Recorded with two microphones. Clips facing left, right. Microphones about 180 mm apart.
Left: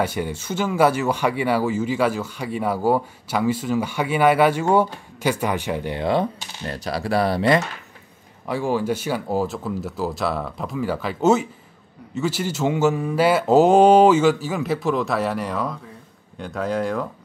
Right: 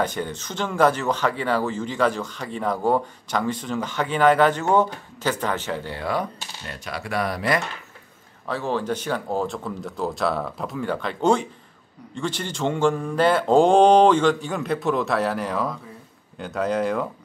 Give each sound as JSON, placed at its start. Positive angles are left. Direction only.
{"t": 0.0, "sound": "speech", "side_deg": 10}
{"t": 6.7, "sound": "speech", "side_deg": 35}
{"t": 8.5, "sound": "speech", "side_deg": 10}